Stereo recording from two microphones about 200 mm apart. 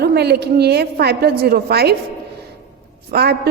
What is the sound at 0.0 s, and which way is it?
A woman's voice, 55° right (ahead or behind).